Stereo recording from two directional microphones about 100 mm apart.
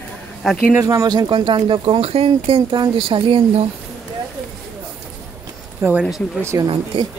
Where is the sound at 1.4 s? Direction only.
55° right (ahead or behind); by 2.6 s 75° right (ahead or behind).